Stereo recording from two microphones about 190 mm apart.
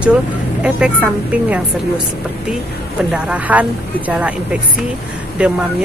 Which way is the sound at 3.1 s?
5° right (ahead or behind).